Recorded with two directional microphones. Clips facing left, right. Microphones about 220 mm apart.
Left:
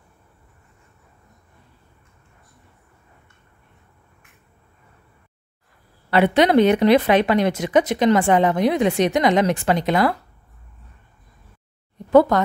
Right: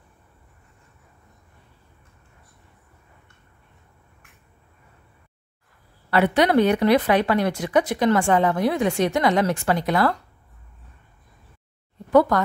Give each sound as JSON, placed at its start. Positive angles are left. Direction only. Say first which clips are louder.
{"t": 6.0, "sound": "a woman's voice", "louder": "left 3 dB", "side_deg": 20}
{"t": 12.1, "sound": "speech", "louder": "left 3 dB", "side_deg": 25}